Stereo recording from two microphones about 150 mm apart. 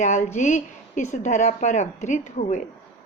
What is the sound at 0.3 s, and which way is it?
A woman's voice, 55° left (ahead or behind).